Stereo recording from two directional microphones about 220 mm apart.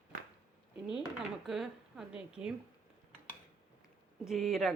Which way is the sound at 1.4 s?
Centre (ahead or behind).